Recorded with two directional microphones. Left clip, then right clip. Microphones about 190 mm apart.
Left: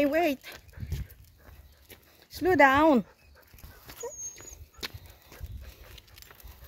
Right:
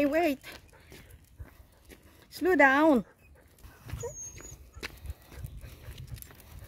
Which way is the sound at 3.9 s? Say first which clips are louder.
Left 1 dB; 15° left (ahead or behind).